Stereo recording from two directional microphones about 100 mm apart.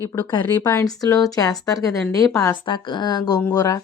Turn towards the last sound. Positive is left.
turn(degrees=35)  # may be behind; listen again after turning